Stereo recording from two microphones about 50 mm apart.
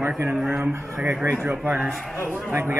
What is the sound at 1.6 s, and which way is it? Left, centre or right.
Speech, right.